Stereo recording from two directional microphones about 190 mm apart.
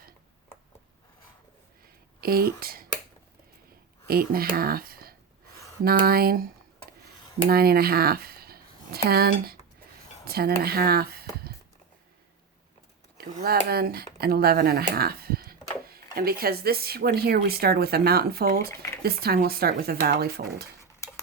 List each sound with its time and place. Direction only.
2.2 s speech: 50° right (ahead or behind)
4.0 s speech: 50° right (ahead or behind)
7.5 s speech: 55° right (ahead or behind)
13.1 s speech: 55° right (ahead or behind)